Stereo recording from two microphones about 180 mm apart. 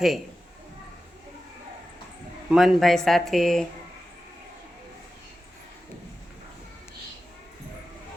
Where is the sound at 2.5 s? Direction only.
Centre (ahead or behind).